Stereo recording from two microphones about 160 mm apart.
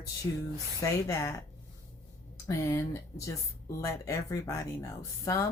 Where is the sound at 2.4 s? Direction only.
20° left (ahead or behind).